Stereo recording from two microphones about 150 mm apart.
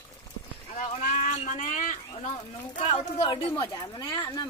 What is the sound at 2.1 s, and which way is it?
Speech, 35° left (ahead or behind).